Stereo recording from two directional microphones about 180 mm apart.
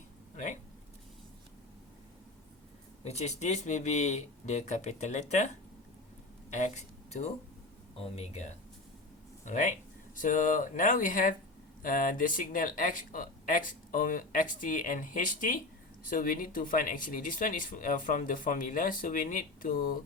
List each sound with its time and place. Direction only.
3.0 s speech: 35° left (ahead or behind)
6.5 s speech: 40° left (ahead or behind)